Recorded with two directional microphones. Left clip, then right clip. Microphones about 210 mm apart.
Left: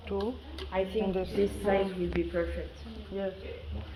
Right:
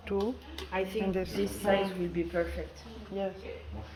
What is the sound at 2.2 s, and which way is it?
Speech, 55° right (ahead or behind).